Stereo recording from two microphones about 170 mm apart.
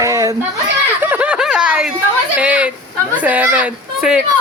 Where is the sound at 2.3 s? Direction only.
5° right (ahead or behind).